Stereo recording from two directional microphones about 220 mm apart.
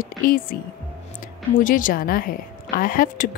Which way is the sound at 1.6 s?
40° left (ahead or behind).